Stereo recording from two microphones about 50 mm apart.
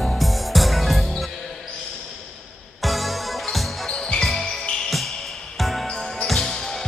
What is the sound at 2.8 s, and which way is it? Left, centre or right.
Music, centre.